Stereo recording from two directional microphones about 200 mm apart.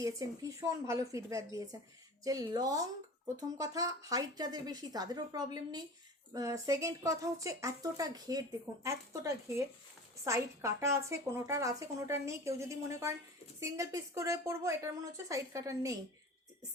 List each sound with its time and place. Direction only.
0.0 s a woman's voice: 15° right (ahead or behind)